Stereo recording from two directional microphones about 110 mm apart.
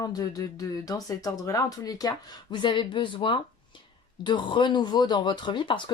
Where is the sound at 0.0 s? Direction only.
35° left (ahead or behind).